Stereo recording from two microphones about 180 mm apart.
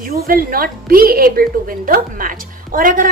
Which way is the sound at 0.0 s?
55° right (ahead or behind).